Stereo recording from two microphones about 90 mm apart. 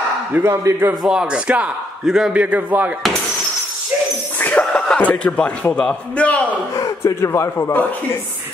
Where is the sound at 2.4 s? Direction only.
20° right (ahead or behind).